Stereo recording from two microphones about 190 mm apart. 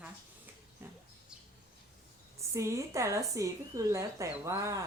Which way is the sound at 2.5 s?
15° right (ahead or behind).